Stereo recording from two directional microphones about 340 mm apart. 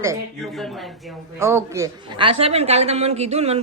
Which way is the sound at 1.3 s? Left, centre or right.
Centre.